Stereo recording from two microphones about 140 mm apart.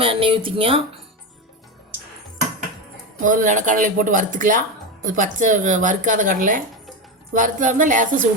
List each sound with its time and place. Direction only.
0.0 s speech: 40° right (ahead or behind)
3.2 s a woman's voice: 65° right (ahead or behind)